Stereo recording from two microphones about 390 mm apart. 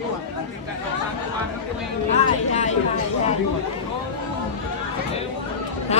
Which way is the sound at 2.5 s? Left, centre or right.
Centre.